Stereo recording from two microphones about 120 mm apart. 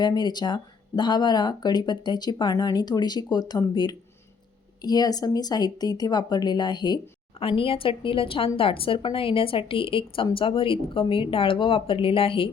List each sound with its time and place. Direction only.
0.0 s speech: 35° left (ahead or behind)
4.8 s speech: 35° left (ahead or behind)
7.3 s speech: 50° left (ahead or behind)